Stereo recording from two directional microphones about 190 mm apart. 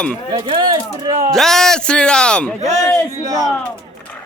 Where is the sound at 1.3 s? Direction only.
Centre (ahead or behind).